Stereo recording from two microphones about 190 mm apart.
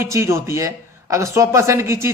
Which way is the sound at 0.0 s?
15° right (ahead or behind).